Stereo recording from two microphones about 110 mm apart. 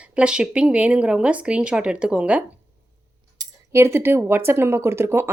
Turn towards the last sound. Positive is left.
turn(degrees=-20)  # may be behind; listen again after turning